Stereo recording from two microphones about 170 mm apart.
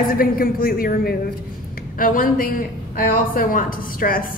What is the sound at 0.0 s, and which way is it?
A woman's voice, 60° left (ahead or behind).